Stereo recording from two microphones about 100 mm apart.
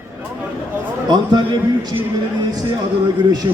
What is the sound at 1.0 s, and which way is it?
Speech, 45° right (ahead or behind).